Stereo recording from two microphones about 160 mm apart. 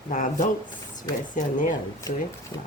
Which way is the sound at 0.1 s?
50° left (ahead or behind).